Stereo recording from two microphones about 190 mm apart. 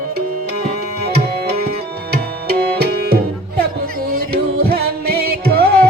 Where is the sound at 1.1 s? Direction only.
55° right (ahead or behind).